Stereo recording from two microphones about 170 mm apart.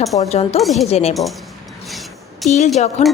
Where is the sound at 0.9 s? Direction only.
35° left (ahead or behind).